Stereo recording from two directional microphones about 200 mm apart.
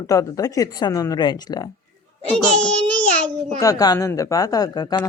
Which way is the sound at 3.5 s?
20° left (ahead or behind).